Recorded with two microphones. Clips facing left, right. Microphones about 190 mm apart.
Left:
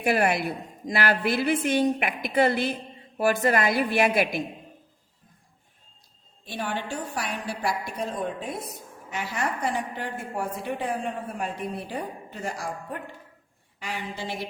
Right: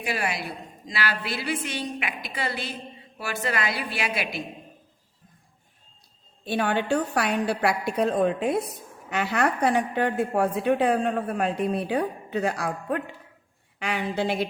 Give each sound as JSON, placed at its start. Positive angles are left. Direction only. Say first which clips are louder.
{"t": 0.0, "sound": "a woman's voice", "louder": "left 6 dB", "side_deg": 55}
{"t": 6.4, "sound": "a woman's voice", "louder": "right 6 dB", "side_deg": -65}